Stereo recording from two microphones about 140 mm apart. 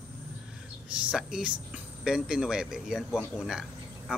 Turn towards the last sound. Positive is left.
turn(degrees=-5)  # may be behind; listen again after turning